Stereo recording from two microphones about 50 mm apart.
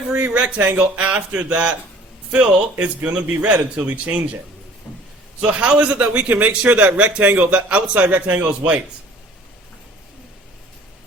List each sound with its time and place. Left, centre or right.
0.2 s a man's voice: right
0.9 s a man's voice: right
3.0 s a man's voice: right
5.4 s a man's voice: right